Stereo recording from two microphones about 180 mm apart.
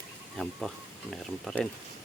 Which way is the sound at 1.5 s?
Centre (ahead or behind).